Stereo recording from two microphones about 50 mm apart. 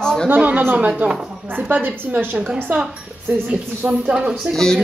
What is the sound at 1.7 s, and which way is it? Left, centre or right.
Speech, right.